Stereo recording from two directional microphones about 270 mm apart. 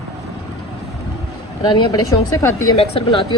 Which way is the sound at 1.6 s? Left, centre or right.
Centre.